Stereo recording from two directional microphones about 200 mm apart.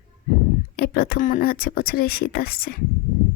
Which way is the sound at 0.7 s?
50° left (ahead or behind).